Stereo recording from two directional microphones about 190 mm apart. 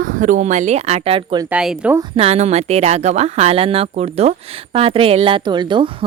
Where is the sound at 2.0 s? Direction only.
30° right (ahead or behind).